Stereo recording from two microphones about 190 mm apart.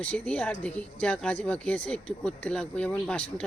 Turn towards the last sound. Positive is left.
turn(degrees=5)  # may be behind; listen again after turning